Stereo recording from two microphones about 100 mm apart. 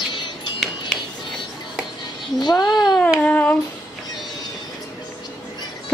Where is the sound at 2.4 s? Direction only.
40° left (ahead or behind).